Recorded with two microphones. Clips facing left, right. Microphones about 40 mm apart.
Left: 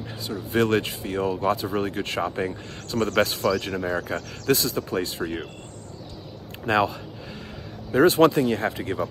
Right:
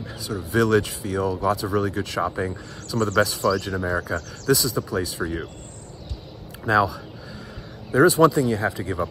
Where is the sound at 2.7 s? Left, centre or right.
Left.